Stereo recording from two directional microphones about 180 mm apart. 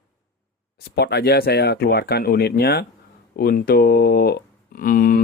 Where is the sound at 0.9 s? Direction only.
65° left (ahead or behind).